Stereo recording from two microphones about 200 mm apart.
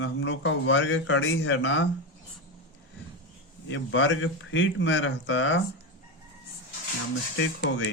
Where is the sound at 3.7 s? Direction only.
65° left (ahead or behind).